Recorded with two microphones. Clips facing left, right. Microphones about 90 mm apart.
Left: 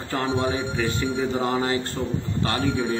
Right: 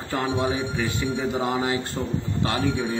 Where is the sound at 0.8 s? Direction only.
15° right (ahead or behind).